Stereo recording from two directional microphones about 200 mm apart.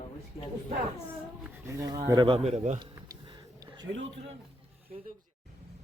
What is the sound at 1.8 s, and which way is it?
Speech, 20° right (ahead or behind).